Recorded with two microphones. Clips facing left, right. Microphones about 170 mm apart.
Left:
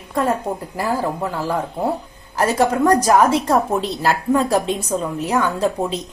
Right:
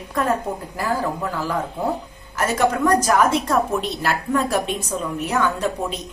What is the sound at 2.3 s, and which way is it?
A woman's voice, 35° left (ahead or behind).